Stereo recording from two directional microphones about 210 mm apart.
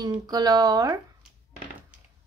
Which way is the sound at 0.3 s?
20° right (ahead or behind).